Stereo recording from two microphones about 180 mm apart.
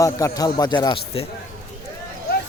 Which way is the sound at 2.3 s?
60° left (ahead or behind).